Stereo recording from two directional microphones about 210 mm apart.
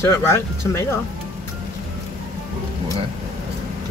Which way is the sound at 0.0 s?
10° left (ahead or behind).